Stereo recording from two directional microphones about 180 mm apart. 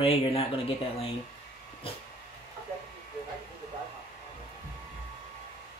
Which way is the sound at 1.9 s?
30° left (ahead or behind).